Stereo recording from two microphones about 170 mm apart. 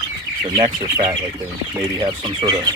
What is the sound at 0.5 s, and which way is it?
Speech, 25° right (ahead or behind).